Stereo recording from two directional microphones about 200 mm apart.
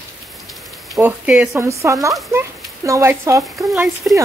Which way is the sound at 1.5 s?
15° right (ahead or behind).